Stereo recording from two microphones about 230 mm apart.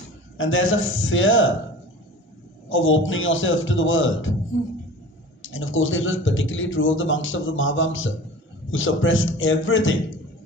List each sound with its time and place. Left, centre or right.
0.3 s speech: left
2.6 s speech: left